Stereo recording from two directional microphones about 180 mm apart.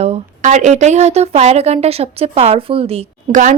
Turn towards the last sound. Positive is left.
turn(degrees=-45)  # may be behind; listen again after turning